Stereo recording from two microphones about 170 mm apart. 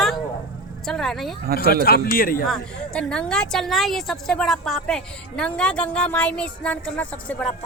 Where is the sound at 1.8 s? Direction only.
60° left (ahead or behind).